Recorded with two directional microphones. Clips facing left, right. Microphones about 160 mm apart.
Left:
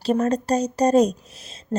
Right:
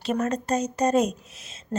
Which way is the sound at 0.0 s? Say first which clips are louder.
Left 5 dB; 35° left (ahead or behind).